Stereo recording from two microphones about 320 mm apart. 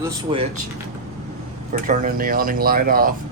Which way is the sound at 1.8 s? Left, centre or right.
Right.